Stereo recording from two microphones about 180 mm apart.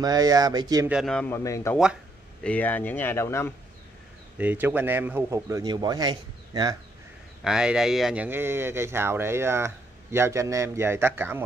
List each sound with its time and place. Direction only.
0.0 s speech: 20° right (ahead or behind)
0.8 s a man's voice: 5° right (ahead or behind)
1.1 s speech: 10° left (ahead or behind)
4.4 s speech: 10° right (ahead or behind)
7.4 s speech: 5° right (ahead or behind)